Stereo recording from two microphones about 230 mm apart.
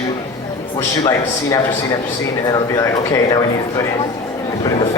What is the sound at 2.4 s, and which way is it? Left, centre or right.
Speech, centre.